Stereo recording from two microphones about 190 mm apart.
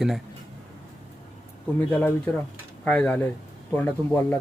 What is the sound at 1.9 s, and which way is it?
Speech, 10° left (ahead or behind).